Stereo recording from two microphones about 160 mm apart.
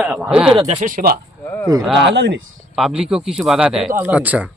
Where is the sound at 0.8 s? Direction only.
60° right (ahead or behind).